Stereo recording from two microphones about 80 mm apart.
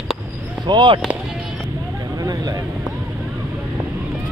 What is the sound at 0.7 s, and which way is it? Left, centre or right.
Speech, right.